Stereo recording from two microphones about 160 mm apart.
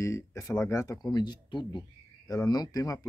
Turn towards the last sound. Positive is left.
turn(degrees=20)  # may be behind; listen again after turning